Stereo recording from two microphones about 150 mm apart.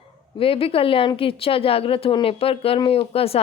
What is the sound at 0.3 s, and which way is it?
A woman's voice, 35° left (ahead or behind).